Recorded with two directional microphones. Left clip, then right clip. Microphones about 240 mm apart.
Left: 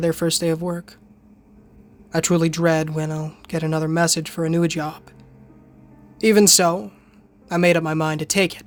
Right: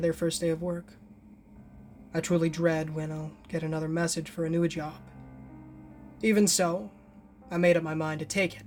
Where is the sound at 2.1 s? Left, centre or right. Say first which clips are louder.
Left 8 dB; left.